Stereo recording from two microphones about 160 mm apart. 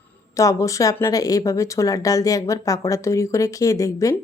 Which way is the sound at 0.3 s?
20° left (ahead or behind).